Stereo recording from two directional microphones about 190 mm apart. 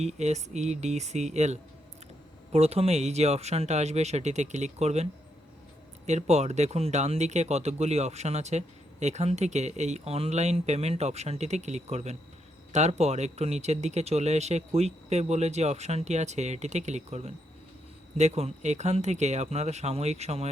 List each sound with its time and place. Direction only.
0.0 s speech: 35° right (ahead or behind)
6.1 s speech: 35° right (ahead or behind)